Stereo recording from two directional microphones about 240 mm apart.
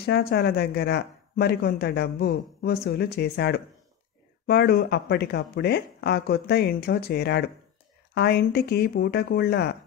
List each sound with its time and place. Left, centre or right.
0.0 s speech: left